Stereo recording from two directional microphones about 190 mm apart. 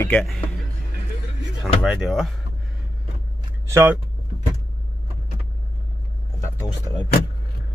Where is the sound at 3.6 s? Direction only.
15° right (ahead or behind).